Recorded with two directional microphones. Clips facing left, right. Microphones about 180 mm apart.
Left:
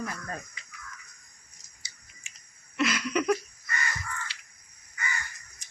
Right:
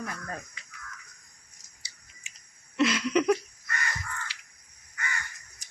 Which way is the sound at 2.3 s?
15° right (ahead or behind).